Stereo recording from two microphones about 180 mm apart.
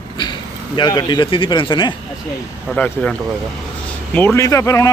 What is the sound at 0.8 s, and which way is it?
A man's voice, 25° left (ahead or behind).